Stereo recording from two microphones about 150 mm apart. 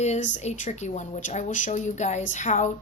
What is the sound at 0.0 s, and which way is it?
A woman's voice, 50° left (ahead or behind).